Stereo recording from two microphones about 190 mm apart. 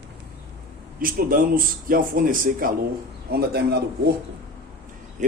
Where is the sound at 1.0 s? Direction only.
50° right (ahead or behind).